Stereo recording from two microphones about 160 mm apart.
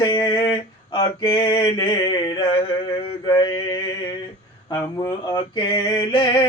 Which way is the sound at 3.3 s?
25° left (ahead or behind).